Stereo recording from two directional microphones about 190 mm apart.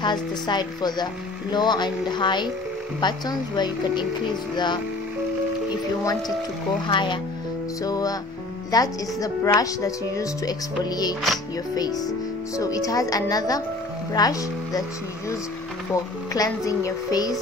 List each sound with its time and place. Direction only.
0.0 s speech: 25° left (ahead or behind)
6.9 s speech: 25° left (ahead or behind)
12.5 s speech: 15° left (ahead or behind)